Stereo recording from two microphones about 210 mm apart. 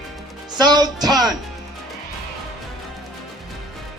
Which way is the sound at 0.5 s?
20° right (ahead or behind).